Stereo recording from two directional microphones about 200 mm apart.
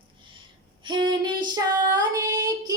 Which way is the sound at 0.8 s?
25° right (ahead or behind).